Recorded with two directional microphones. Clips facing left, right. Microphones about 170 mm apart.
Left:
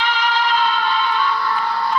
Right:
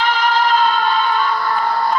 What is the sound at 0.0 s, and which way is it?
Music, 45° right (ahead or behind).